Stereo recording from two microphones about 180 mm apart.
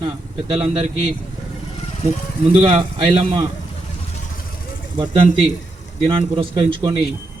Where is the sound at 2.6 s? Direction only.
35° right (ahead or behind).